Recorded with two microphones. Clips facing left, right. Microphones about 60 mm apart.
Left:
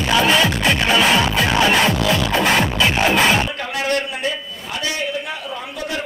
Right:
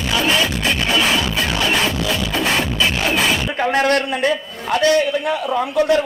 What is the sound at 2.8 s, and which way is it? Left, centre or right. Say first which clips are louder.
Music: left 2 dB; left.